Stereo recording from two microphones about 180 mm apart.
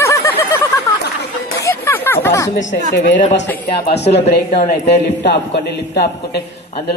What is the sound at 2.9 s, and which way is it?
A man's voice, 80° left.